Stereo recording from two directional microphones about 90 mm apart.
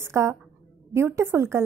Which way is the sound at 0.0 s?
30° right (ahead or behind).